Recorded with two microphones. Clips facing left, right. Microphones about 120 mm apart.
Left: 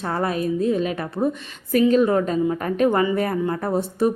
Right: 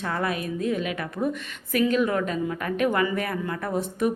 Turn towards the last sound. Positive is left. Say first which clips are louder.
# left 4 dB
turn(degrees=35)  # may be behind; listen again after turning